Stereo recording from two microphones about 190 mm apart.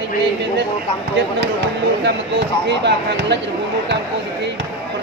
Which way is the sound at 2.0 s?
65° right (ahead or behind).